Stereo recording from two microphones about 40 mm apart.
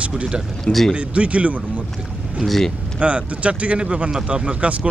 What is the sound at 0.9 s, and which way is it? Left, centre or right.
Speech, right.